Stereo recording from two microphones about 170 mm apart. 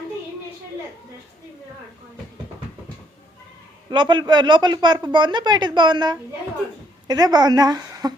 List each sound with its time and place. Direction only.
3.8 s speech: 25° right (ahead or behind)